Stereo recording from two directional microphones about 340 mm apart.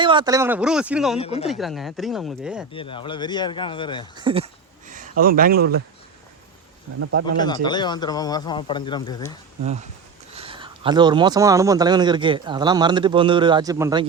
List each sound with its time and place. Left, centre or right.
0.0 s speech: centre
1.2 s speech: centre
1.5 s speech: centre
2.7 s speech: centre
4.2 s speech: centre
7.0 s speech: right
7.3 s speech: centre
10.3 s speech: centre